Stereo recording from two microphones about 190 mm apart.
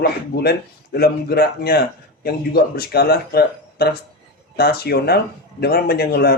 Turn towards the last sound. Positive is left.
turn(degrees=55)  # may be behind; listen again after turning